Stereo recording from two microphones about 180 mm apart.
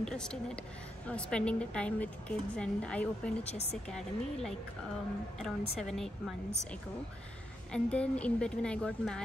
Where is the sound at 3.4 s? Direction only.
35° left (ahead or behind).